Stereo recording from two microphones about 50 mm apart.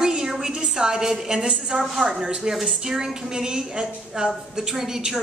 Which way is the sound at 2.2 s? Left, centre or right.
Centre.